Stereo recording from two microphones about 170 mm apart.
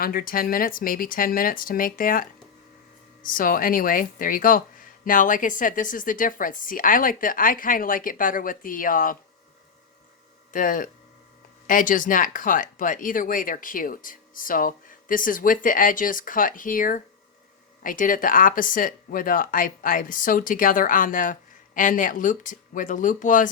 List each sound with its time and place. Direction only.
0.0 s speech: 60° left (ahead or behind)
3.2 s speech: 55° left (ahead or behind)
10.5 s speech: 55° left (ahead or behind)